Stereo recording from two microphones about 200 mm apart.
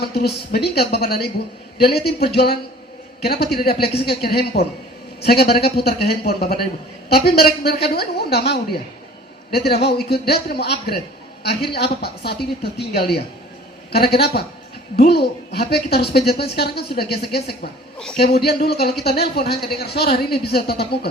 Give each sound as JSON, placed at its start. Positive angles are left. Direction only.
{"t": 0.0, "sound": "speech", "side_deg": 50}